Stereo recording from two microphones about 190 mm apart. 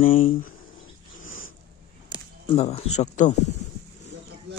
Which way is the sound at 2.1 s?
30° left (ahead or behind).